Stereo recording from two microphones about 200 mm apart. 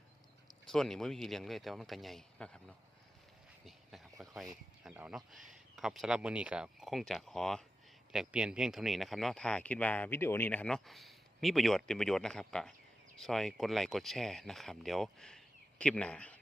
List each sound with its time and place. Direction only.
0.7 s speech: centre (ahead or behind)
3.7 s a sound: centre (ahead or behind)
4.8 s speech: 5° right (ahead or behind)